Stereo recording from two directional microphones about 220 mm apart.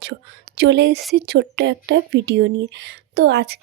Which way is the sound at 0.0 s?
50° right (ahead or behind).